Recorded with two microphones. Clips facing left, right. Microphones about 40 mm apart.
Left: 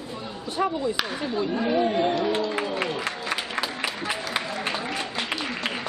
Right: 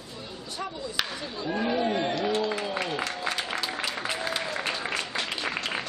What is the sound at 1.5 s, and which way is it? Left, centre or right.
Speech, centre.